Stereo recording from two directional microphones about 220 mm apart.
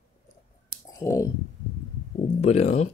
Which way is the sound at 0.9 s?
15° left (ahead or behind).